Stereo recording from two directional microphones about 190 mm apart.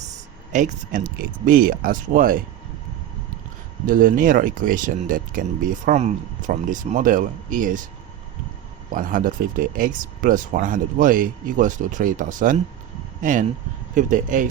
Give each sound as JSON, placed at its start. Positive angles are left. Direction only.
{"t": 0.5, "sound": "speech", "side_deg": -40}
{"t": 3.8, "sound": "speech", "side_deg": -45}
{"t": 8.9, "sound": "speech", "side_deg": -45}
{"t": 13.9, "sound": "speech", "side_deg": -40}